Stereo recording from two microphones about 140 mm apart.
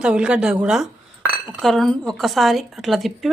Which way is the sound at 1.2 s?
10° right (ahead or behind).